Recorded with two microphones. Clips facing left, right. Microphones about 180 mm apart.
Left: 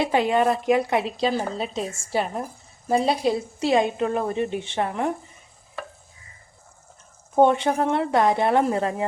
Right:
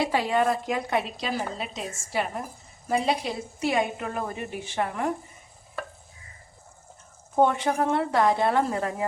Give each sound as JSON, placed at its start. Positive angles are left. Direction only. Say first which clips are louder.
{"t": 0.0, "sound": "a woman's voice", "louder": "left 3 dB", "side_deg": 20}
{"t": 1.2, "sound": "a woman's voice", "louder": "left 6 dB", "side_deg": 30}
{"t": 7.4, "sound": "a woman's voice", "louder": "left 4 dB", "side_deg": 25}